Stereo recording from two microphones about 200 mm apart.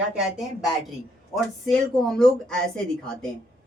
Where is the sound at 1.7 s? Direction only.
Centre (ahead or behind).